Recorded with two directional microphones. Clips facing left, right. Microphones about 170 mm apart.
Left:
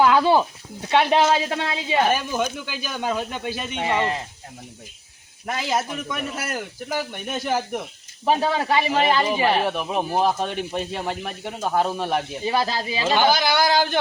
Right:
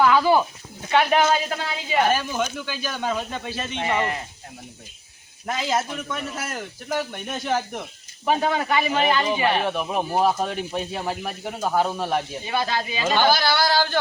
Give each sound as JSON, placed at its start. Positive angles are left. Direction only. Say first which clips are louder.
{"t": 0.0, "sound": "a sound", "louder": "left 1 dB", "side_deg": 15}
{"t": 0.9, "sound": "speech", "louder": "left 1 dB", "side_deg": 25}
{"t": 2.0, "sound": "speech", "louder": "even", "side_deg": 15}
{"t": 5.5, "sound": "speech", "louder": "even", "side_deg": 5}
{"t": 8.2, "sound": "a man's voice", "louder": "left 1 dB", "side_deg": 30}
{"t": 9.6, "sound": "speech", "louder": "even", "side_deg": 0}
{"t": 12.5, "sound": "a man's voice", "louder": "left 3 dB", "side_deg": 35}
{"t": 13.1, "sound": "speech", "louder": "left 1 dB", "side_deg": 15}